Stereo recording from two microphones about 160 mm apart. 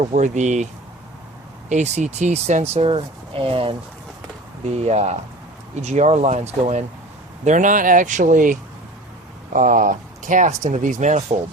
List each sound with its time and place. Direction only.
0.0 s speech: 45° right (ahead or behind)
1.7 s speech: 45° right (ahead or behind)